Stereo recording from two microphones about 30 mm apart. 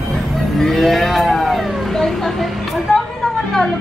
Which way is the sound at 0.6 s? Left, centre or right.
Centre.